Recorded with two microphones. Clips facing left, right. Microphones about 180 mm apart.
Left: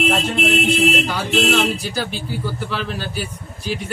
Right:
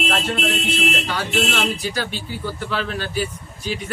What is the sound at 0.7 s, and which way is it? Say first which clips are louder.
A man's voice: left 5 dB; 5° left (ahead or behind).